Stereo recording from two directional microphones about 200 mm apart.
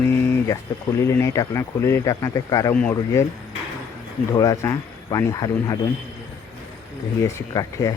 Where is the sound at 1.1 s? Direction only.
15° left (ahead or behind).